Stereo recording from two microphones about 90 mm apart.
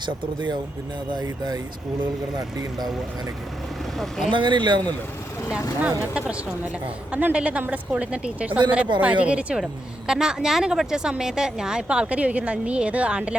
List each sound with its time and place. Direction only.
0.0 s speech: 55° right (ahead or behind)
1.1 s speech: 45° right (ahead or behind)
3.9 s speech: 5° left (ahead or behind)
4.3 s speech: 65° right (ahead or behind)
6.0 s speech: 10° right (ahead or behind)